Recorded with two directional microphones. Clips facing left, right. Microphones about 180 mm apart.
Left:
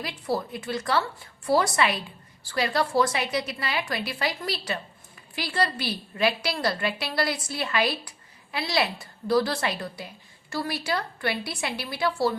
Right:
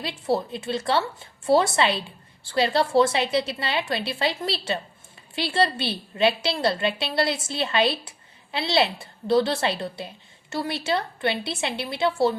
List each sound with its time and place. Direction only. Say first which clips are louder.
0.0 s a woman's voice: right 4 dB; 25° right (ahead or behind)